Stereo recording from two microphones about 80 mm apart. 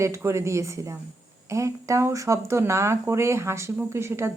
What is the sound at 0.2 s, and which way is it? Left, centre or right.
Speech, right.